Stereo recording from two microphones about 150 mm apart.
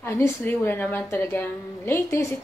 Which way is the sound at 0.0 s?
15° left (ahead or behind).